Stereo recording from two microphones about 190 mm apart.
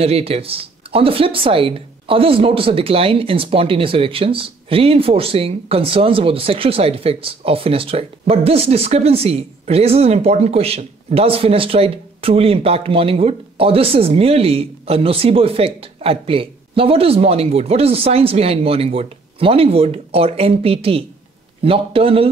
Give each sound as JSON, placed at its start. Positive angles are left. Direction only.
{"t": 0.0, "sound": "speech", "side_deg": -30}